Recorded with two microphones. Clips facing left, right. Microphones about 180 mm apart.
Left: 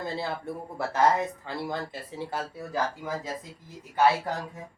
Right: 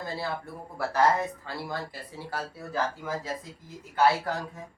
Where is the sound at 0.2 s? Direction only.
20° left (ahead or behind).